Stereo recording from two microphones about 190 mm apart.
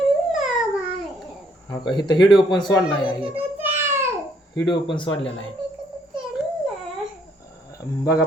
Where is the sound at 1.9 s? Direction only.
20° left (ahead or behind).